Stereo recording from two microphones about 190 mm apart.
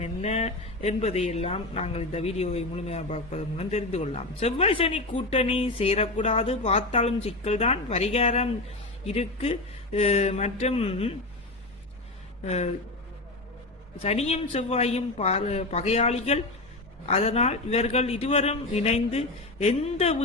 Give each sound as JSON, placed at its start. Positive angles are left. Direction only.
{"t": 0.0, "sound": "speech", "side_deg": 35}
{"t": 14.0, "sound": "speech", "side_deg": 35}